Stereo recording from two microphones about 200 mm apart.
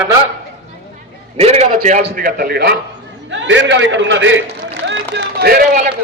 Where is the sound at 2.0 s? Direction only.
50° right (ahead or behind).